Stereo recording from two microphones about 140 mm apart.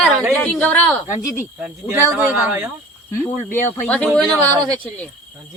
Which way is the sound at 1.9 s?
15° right (ahead or behind).